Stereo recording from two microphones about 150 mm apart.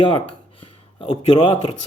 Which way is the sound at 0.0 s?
35° left (ahead or behind).